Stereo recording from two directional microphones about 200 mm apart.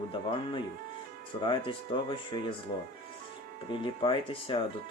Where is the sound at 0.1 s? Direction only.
25° left (ahead or behind).